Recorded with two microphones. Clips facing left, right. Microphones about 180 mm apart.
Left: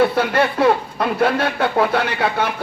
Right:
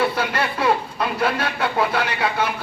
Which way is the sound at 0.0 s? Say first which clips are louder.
Left 6 dB; 50° left (ahead or behind).